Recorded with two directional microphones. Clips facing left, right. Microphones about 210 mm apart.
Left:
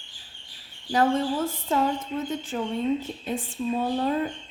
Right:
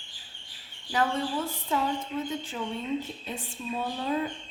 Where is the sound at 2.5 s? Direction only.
50° left (ahead or behind).